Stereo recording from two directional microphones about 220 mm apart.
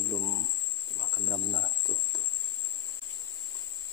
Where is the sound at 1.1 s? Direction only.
15° right (ahead or behind).